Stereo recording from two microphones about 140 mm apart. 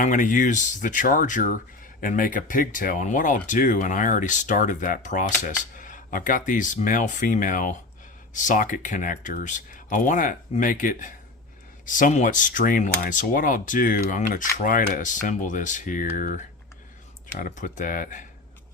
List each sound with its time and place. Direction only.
0.0 s speech: 65° left (ahead or behind)